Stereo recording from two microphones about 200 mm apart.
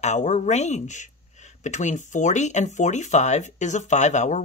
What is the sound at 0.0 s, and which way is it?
Speech, 35° left (ahead or behind).